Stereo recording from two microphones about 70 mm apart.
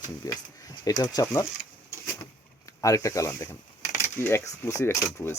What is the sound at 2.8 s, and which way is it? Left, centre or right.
Speech, left.